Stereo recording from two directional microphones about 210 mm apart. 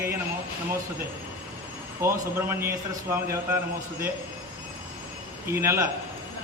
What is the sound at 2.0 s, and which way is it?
A man's voice, 10° right (ahead or behind).